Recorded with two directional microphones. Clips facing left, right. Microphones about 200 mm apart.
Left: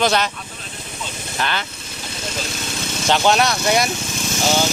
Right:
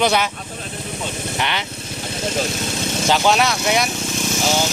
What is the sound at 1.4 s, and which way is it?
Speech, 20° right (ahead or behind).